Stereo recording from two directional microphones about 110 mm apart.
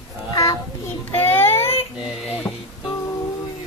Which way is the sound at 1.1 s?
20° left (ahead or behind).